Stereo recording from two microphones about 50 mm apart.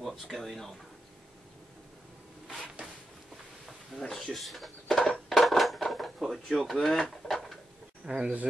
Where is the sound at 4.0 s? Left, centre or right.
Centre.